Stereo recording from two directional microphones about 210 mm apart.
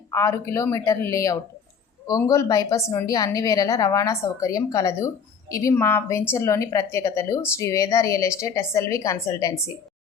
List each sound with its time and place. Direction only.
0.1 s a woman's voice: 15° left (ahead or behind)